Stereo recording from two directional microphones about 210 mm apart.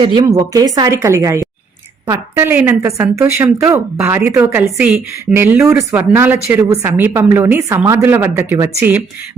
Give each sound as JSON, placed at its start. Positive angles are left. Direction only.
{"t": 0.0, "sound": "a woman's voice", "side_deg": -20}